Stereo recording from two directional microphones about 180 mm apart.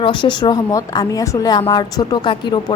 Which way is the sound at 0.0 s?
25° left (ahead or behind).